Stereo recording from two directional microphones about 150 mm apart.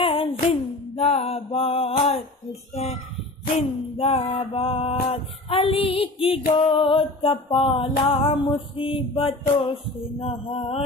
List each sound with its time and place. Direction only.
0.0 s music: 35° left (ahead or behind)
2.7 s speech: 45° left (ahead or behind)
3.5 s a sound: 45° left (ahead or behind)
4.6 s female singing: 40° left (ahead or behind)
6.5 s music: 35° left (ahead or behind)